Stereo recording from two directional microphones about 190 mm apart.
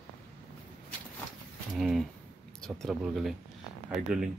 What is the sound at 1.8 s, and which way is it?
Speech, centre (ahead or behind).